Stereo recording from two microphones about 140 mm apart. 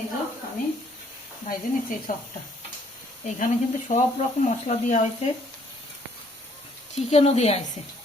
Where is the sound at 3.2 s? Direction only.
60° left (ahead or behind).